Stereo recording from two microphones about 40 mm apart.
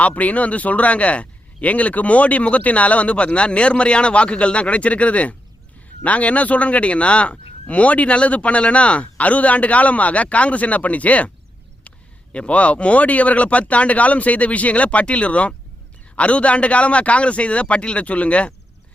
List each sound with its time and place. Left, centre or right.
0.0 s speech: left